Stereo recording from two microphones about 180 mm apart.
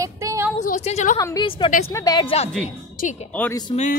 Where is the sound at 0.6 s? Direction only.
40° left (ahead or behind).